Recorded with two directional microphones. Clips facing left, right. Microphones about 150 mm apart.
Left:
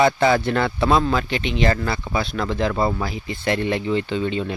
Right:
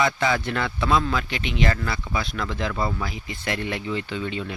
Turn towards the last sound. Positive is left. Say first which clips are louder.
# left 6 dB
turn(degrees=30)  # may be behind; listen again after turning